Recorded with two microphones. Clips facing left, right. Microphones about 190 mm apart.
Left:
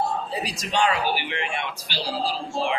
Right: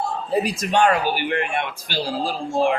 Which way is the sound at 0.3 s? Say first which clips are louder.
Right 8 dB; 55° right (ahead or behind).